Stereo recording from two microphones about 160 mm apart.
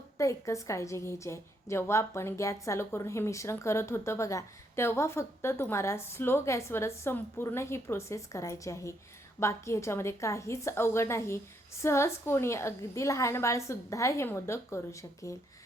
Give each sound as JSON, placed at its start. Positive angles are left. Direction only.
{"t": 0.2, "sound": "a woman's voice", "side_deg": 20}